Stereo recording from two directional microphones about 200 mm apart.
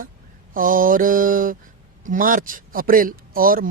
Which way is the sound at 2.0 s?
45° right (ahead or behind).